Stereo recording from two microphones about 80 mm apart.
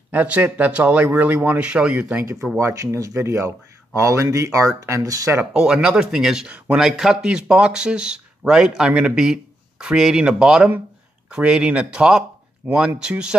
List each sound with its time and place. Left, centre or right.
0.1 s speech: centre
2.7 s speech: right
5.5 s speech: centre